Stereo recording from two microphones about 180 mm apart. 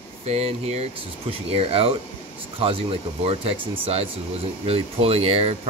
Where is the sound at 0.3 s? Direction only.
35° right (ahead or behind).